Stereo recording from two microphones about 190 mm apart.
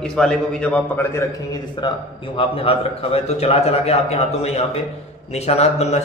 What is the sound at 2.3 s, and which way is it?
A man's voice, 30° left (ahead or behind).